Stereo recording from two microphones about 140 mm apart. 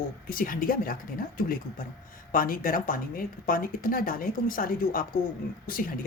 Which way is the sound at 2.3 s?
80° left.